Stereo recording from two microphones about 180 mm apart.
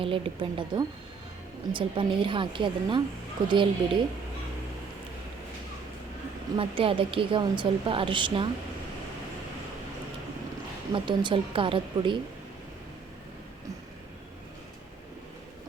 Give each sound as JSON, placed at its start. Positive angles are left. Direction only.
{"t": 0.0, "sound": "a woman's voice", "side_deg": -30}
{"t": 6.6, "sound": "a woman's voice", "side_deg": -30}
{"t": 10.9, "sound": "a woman's voice", "side_deg": -25}